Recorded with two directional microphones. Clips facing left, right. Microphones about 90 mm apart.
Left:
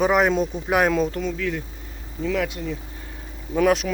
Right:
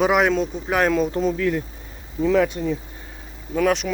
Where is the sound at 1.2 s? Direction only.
40° right (ahead or behind).